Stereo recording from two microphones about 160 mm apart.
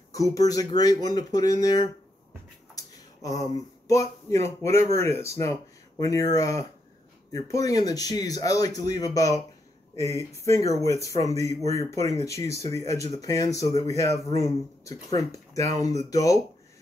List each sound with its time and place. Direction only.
0.1 s speech: 20° left (ahead or behind)